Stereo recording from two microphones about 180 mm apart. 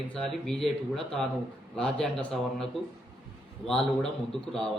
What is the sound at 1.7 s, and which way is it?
Speech, 5° left (ahead or behind).